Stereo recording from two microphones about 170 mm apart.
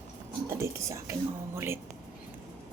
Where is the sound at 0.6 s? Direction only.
15° right (ahead or behind).